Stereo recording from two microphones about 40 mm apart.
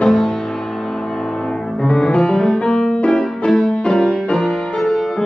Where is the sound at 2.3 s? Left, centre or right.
Centre.